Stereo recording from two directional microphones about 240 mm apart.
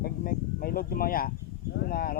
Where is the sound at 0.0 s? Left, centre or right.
Left.